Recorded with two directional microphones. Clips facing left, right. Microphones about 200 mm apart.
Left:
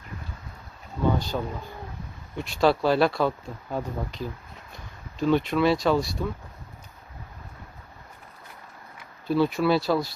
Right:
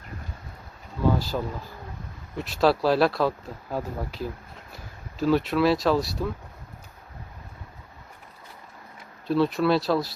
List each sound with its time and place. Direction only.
1.3 s speech: centre (ahead or behind)
9.2 s speech: centre (ahead or behind)